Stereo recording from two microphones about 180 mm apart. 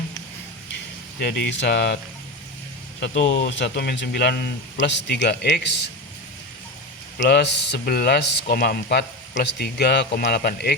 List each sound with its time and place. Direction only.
1.2 s speech: 70° left (ahead or behind)
3.0 s speech: 75° left (ahead or behind)
7.2 s speech: 70° left (ahead or behind)